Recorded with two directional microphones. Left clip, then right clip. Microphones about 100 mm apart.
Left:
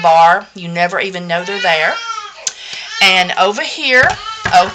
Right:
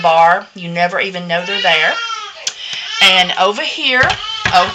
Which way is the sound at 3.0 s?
40° left (ahead or behind).